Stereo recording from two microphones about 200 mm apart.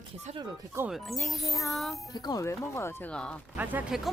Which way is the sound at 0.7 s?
5° right (ahead or behind).